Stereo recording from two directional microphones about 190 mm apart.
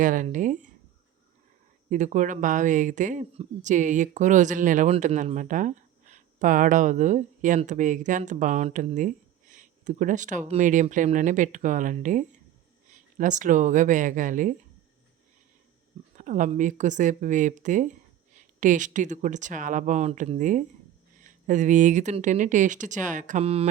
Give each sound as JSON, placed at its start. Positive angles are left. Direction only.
{"t": 0.0, "sound": "speech", "side_deg": -45}
{"t": 1.9, "sound": "speech", "side_deg": -40}
{"t": 16.1, "sound": "speech", "side_deg": -40}